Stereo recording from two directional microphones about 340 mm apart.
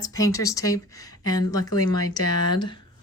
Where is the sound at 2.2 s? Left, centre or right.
Left.